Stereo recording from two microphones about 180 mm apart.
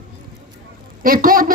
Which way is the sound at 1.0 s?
50° right (ahead or behind).